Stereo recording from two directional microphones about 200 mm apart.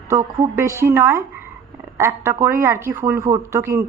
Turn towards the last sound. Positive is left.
turn(degrees=-15)  # may be behind; listen again after turning